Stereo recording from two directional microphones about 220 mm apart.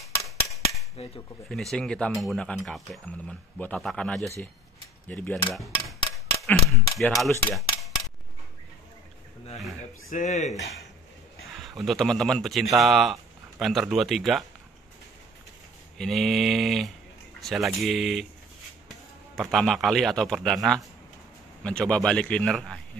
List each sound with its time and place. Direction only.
1.0 s speech: 25° left (ahead or behind)
1.5 s speech: centre (ahead or behind)
6.1 s a sound: centre (ahead or behind)
7.2 s cutlery: 5° left (ahead or behind)
10.0 s speech: 35° left (ahead or behind)
11.6 s speech: centre (ahead or behind)
16.0 s speech: centre (ahead or behind)
19.5 s speech: centre (ahead or behind)